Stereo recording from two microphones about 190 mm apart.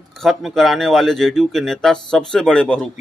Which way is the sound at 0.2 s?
Centre (ahead or behind).